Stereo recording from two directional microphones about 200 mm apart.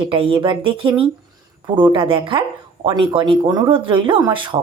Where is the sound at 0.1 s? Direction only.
25° right (ahead or behind).